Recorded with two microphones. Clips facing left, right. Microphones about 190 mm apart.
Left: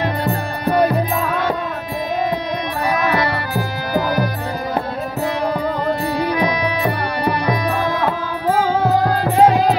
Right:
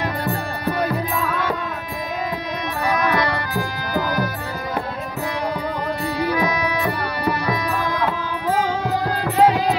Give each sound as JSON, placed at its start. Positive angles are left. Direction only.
{"t": 0.0, "sound": "music", "side_deg": 20}
{"t": 2.9, "sound": "music", "side_deg": 10}
{"t": 6.5, "sound": "music", "side_deg": 15}
{"t": 7.9, "sound": "music", "side_deg": 30}
{"t": 9.0, "sound": "music", "side_deg": 45}